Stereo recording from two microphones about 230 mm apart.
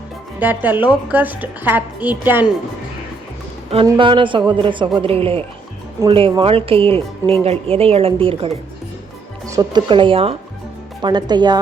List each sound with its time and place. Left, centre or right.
0.3 s a woman's voice: centre
3.8 s speech: right